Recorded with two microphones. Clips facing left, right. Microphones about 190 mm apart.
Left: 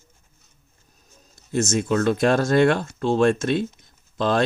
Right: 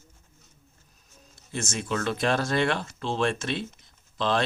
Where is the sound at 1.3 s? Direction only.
45° left (ahead or behind).